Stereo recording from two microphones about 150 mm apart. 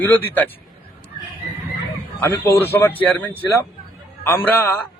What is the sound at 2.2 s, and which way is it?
Speech, 15° left (ahead or behind).